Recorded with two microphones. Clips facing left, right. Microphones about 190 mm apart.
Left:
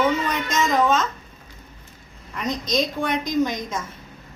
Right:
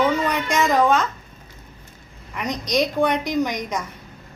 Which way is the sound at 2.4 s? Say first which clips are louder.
Right 2 dB; 15° right (ahead or behind).